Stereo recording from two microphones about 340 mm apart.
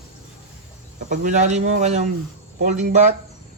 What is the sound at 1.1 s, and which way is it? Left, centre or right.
Speech, right.